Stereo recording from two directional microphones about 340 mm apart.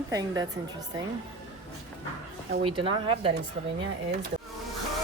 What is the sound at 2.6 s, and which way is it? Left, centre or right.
Speech, centre.